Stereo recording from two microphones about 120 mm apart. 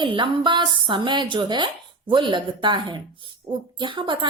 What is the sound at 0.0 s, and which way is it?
A woman's voice, 45° right (ahead or behind).